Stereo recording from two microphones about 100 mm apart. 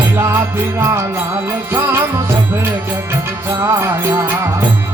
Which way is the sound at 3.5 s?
30° right (ahead or behind).